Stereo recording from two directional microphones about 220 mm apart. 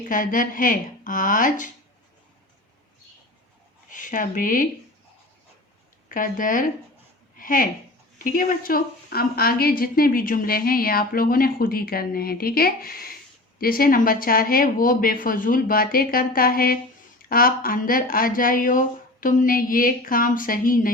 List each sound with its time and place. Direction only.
0.0 s speech: 35° left (ahead or behind)
3.8 s speech: 35° left (ahead or behind)
6.1 s speech: 40° left (ahead or behind)
7.3 s a sound: 40° left (ahead or behind)
8.2 s a woman's voice: 40° left (ahead or behind)